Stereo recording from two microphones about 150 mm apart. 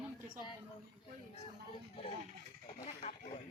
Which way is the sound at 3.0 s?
40° left (ahead or behind).